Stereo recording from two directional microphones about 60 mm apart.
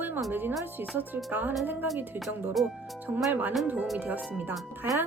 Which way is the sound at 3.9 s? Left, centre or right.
Right.